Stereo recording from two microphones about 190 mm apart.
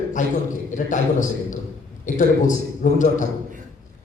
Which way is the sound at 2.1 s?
45° left (ahead or behind).